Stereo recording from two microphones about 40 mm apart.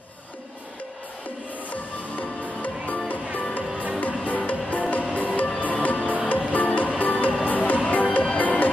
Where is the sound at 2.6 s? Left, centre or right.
Left.